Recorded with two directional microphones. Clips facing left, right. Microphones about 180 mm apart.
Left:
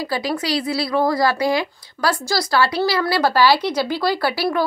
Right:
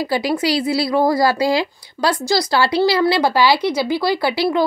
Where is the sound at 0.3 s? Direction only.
25° right (ahead or behind).